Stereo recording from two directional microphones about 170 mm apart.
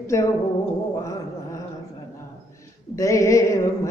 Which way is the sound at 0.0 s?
15° left (ahead or behind).